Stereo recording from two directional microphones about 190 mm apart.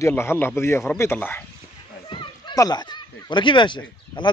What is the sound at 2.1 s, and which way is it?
Speech, 25° left (ahead or behind).